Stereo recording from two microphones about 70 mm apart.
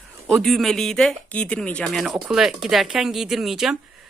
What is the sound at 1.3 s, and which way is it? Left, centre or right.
Speech, centre.